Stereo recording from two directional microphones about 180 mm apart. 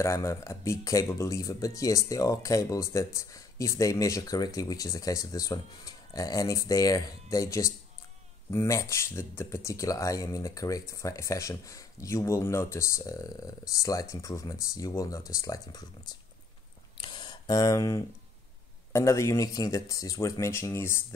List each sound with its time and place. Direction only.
0.0 s speech: 15° left (ahead or behind)
17.0 s a sound: 25° left (ahead or behind)
18.9 s speech: 15° left (ahead or behind)